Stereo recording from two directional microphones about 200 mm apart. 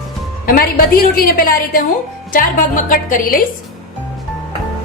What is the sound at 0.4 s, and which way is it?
A woman's voice, 45° left (ahead or behind).